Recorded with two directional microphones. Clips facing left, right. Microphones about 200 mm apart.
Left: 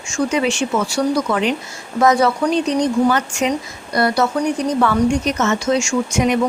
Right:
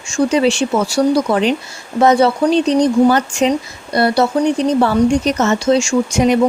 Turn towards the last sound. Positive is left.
turn(degrees=-35)  # may be behind; listen again after turning